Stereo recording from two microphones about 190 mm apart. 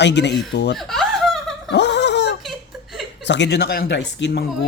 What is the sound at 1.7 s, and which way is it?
Fowl, 65° left (ahead or behind).